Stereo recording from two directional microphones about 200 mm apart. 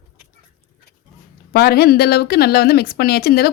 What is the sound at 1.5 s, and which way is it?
A woman's voice, 50° left (ahead or behind).